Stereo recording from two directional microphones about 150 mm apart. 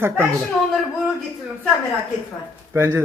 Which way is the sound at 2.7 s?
15° right (ahead or behind).